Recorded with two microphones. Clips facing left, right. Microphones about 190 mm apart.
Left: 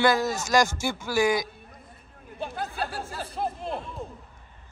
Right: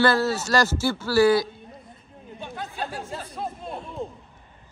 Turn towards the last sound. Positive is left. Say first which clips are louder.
# left 2 dB
turn(degrees=30)  # may be behind; listen again after turning